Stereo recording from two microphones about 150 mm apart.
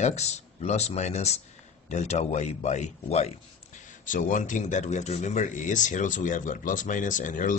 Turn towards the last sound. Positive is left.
turn(degrees=60)  # may be behind; listen again after turning